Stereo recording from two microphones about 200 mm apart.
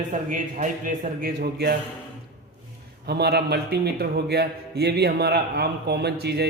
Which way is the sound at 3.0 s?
55° right (ahead or behind).